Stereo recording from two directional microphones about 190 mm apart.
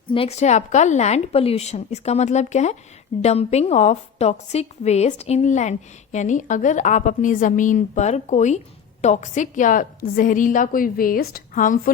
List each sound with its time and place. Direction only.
0.1 s a woman's voice: 30° left (ahead or behind)